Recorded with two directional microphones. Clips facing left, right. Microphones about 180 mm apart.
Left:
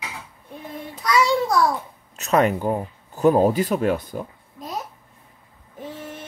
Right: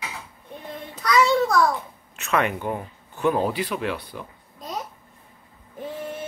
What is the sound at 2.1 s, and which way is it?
Speech, 40° left (ahead or behind).